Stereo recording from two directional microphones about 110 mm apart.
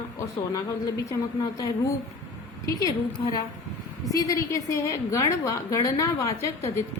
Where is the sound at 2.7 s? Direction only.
35° left (ahead or behind).